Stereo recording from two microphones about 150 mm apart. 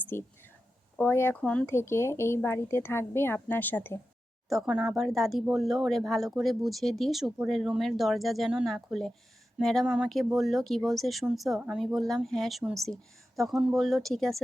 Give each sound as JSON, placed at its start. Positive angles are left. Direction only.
{"t": 0.1, "sound": "speech", "side_deg": 15}
{"t": 4.4, "sound": "speech", "side_deg": 0}